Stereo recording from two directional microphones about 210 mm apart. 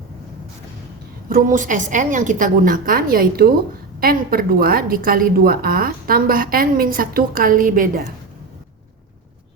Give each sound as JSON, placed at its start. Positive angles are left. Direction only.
{"t": 1.3, "sound": "a woman's voice", "side_deg": -40}